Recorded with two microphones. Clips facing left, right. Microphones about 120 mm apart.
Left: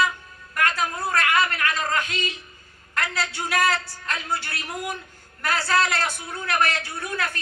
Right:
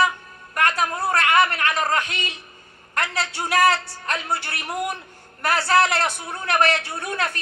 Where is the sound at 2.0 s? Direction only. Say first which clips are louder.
Left 1 dB; 60° right (ahead or behind).